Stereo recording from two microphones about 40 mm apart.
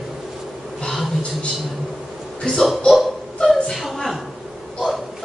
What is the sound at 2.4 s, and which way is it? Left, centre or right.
Speech, centre.